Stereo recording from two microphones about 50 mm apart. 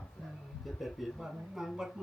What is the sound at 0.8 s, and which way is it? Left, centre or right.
Speech, centre.